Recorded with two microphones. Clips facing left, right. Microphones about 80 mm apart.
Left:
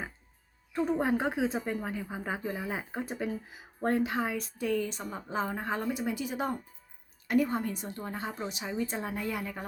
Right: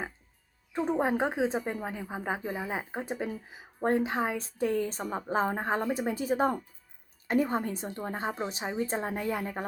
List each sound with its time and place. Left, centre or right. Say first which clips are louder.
0.9 s a woman's voice: right 2 dB; right